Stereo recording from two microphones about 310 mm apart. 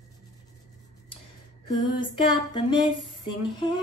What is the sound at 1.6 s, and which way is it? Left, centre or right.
Female singing, centre.